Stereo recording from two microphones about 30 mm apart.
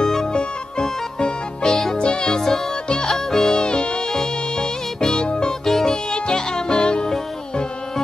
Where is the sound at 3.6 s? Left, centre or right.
Left.